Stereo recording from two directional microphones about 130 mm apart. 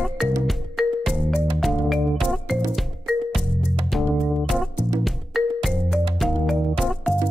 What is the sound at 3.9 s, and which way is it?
Music, centre (ahead or behind).